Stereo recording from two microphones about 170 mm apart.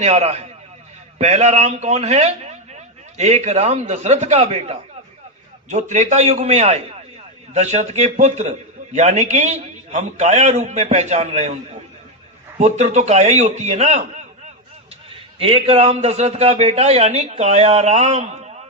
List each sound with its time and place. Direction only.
0.0 s a man's voice: 40° right (ahead or behind)
12.5 s a man's voice: 40° right (ahead or behind)
15.1 s a man's voice: 35° right (ahead or behind)